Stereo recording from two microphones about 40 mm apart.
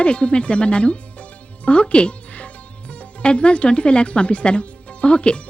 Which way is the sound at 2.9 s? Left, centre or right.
Left.